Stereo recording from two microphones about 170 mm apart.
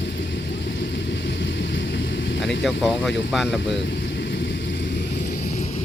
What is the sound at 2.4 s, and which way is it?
Speech, 90° left.